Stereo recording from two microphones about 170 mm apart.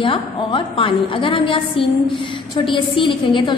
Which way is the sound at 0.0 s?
30° left (ahead or behind).